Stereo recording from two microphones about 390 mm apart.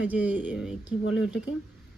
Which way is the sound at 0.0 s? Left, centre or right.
Centre.